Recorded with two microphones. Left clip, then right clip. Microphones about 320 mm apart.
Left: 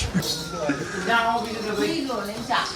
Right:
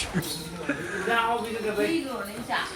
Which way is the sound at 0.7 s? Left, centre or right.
Centre.